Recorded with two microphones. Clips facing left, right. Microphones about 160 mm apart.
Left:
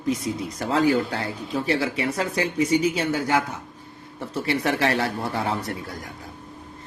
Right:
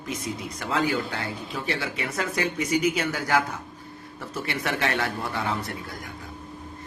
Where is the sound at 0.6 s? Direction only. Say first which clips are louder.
Left 5 dB; 35° left (ahead or behind).